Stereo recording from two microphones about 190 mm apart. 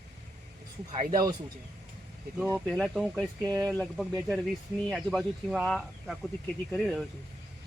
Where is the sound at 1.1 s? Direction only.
20° right (ahead or behind).